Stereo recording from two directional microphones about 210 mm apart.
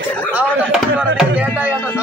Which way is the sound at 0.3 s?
5° right (ahead or behind).